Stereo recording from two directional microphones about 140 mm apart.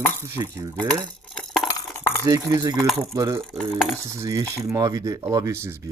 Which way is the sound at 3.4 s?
Centre (ahead or behind).